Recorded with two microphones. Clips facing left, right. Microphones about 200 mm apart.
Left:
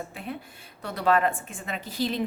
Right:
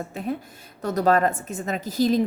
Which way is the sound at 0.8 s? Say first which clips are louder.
Right 4 dB; 40° right (ahead or behind).